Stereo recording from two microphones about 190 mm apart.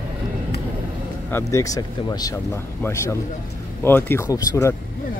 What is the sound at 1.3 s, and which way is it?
Speech, 15° left (ahead or behind).